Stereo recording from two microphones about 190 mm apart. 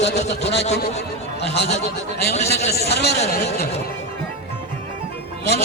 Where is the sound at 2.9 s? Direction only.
60° left (ahead or behind).